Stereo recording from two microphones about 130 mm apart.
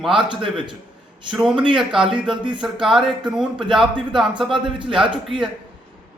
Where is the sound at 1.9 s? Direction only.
5° right (ahead or behind).